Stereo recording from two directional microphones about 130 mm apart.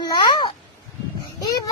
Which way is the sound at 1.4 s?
30° left (ahead or behind).